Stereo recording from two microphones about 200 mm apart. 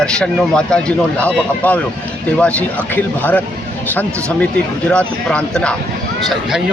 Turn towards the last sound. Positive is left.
turn(degrees=5)  # may be behind; listen again after turning